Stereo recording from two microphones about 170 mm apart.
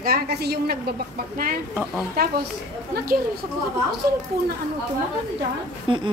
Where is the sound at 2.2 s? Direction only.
65° right (ahead or behind).